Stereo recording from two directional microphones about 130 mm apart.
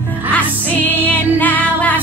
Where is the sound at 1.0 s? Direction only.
15° left (ahead or behind).